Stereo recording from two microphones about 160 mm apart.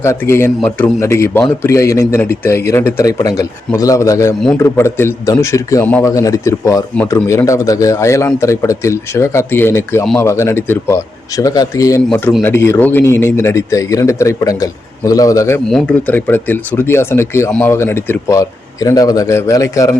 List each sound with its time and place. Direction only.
0.0 s a man's voice: 15° left (ahead or behind)
12.0 s speech: 10° left (ahead or behind)
15.7 s a man's voice: 10° left (ahead or behind)